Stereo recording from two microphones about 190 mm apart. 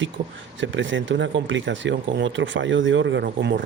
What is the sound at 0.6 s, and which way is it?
Speech, 80° right.